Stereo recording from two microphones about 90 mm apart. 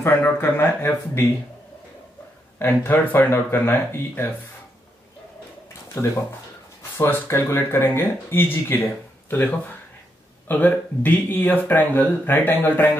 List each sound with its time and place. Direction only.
0.0 s speech: 25° left (ahead or behind)
2.6 s speech: 25° left (ahead or behind)
6.0 s speech: 30° left (ahead or behind)